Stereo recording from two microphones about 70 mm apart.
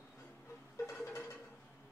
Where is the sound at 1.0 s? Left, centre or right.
Left.